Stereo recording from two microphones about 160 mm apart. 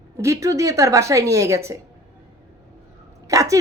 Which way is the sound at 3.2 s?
20° right (ahead or behind).